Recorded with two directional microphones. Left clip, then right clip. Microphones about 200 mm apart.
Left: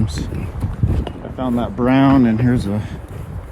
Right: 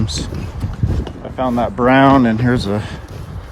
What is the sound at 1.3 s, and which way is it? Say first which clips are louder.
Speech: right 5 dB; 30° right (ahead or behind).